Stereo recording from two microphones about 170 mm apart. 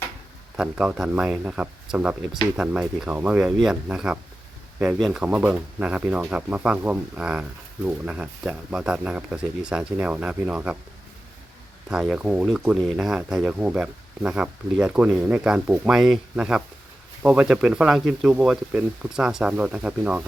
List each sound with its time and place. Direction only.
0.5 s speech: 5° right (ahead or behind)
11.9 s speech: 5° right (ahead or behind)